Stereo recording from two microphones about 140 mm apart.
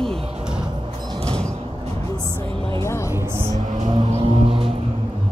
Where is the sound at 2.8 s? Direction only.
20° left (ahead or behind).